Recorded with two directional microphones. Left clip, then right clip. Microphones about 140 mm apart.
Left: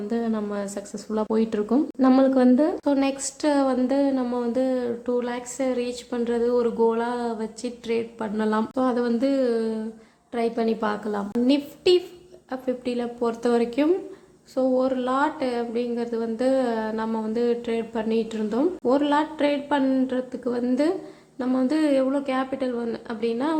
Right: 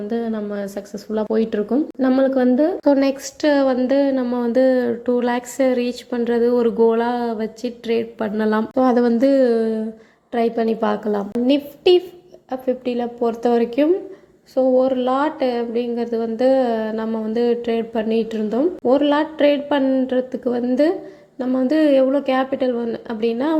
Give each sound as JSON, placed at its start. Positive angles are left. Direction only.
{"t": 0.1, "sound": "speech", "side_deg": -10}
{"t": 2.8, "sound": "speech", "side_deg": -30}
{"t": 3.4, "sound": "speech", "side_deg": -15}